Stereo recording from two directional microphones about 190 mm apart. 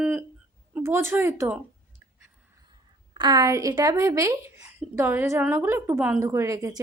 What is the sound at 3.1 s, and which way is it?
A woman's voice, 20° right (ahead or behind).